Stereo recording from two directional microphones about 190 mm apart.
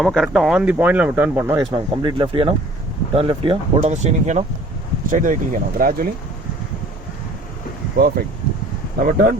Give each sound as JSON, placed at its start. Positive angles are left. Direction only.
{"t": 0.0, "sound": "speech", "side_deg": 0}
{"t": 1.7, "sound": "speech", "side_deg": -25}
{"t": 7.9, "sound": "speech", "side_deg": -50}